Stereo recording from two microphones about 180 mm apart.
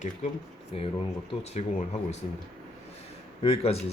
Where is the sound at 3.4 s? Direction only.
35° left (ahead or behind).